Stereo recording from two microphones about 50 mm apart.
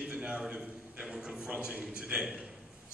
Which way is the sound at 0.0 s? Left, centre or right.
Centre.